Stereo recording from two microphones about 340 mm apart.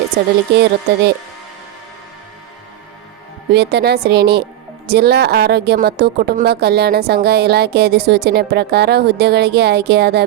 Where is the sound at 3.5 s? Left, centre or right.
Right.